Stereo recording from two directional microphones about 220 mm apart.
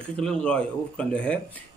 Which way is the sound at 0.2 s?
5° left (ahead or behind).